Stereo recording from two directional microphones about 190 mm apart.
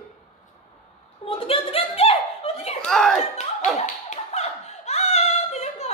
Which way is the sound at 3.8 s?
35° left (ahead or behind).